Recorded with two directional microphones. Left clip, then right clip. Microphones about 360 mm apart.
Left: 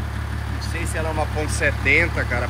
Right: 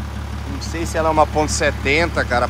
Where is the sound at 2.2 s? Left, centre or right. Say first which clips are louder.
Right 6 dB; right.